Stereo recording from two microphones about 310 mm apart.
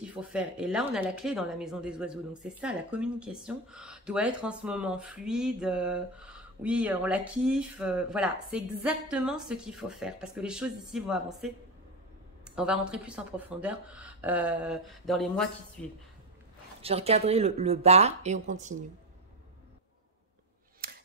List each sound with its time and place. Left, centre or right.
0.0 s speech: centre
12.4 s speech: centre
16.8 s speech: centre